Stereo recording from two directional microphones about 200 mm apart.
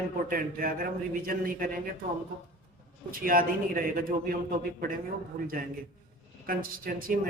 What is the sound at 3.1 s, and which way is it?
A man's voice, 45° right (ahead or behind).